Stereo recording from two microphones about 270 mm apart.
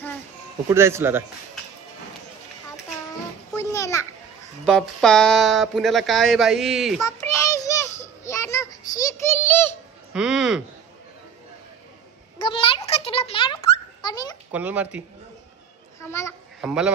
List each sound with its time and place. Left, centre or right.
0.7 s speech: centre
3.5 s children playing: centre
4.6 s speech: centre
7.1 s child singing: centre
10.1 s speech: centre
12.4 s a sound: centre
14.5 s speech: centre
16.0 s a sound: centre
16.6 s speech: centre